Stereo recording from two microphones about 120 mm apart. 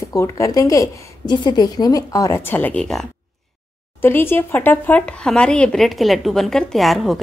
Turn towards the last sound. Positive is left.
turn(degrees=0)  # may be behind; listen again after turning